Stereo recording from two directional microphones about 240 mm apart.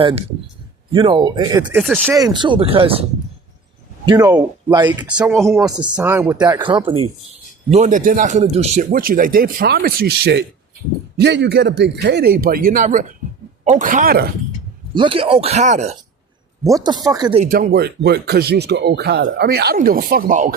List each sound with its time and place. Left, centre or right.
0.0 s speech: right
1.8 s speech: centre
2.0 s speech: centre; by 14.3 s right
14.9 s speech: right
16.6 s speech: centre
17.4 s speech: right